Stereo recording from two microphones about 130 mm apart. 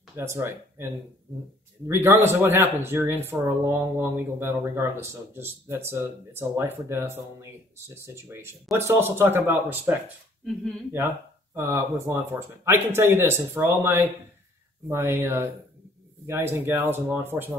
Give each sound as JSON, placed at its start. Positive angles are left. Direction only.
{"t": 0.1, "sound": "speech", "side_deg": -20}
{"t": 11.5, "sound": "speech", "side_deg": -20}